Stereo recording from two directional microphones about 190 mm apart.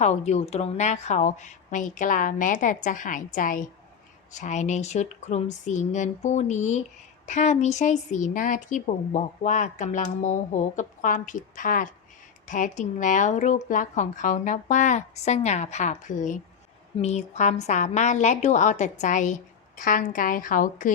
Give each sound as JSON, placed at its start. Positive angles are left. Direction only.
{"t": 0.0, "sound": "speech", "side_deg": 35}